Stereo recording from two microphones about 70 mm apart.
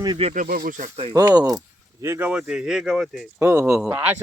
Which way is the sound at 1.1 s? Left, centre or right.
Right.